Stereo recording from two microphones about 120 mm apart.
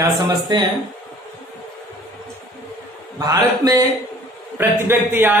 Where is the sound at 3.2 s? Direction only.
30° right (ahead or behind).